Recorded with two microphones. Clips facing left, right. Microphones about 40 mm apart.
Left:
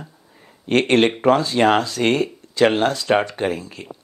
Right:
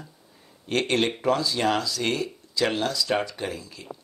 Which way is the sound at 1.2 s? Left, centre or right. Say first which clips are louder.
Left 8 dB; left.